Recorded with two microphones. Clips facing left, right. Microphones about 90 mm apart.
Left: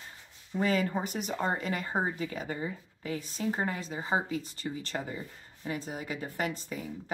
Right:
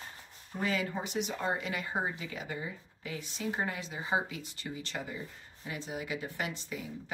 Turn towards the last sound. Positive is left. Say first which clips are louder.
# left 4 dB
turn(degrees=40)  # may be behind; listen again after turning